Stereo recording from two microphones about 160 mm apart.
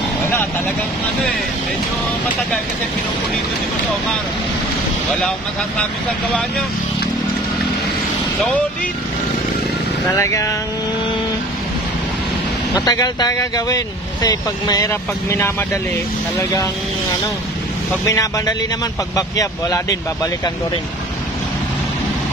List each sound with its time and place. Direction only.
10.1 s speech: 20° left (ahead or behind)
12.7 s speech: 20° left (ahead or behind)
18.0 s speech: 20° left (ahead or behind)